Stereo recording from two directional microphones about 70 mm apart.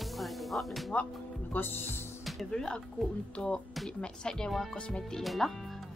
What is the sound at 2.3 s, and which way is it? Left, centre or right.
Speech, centre.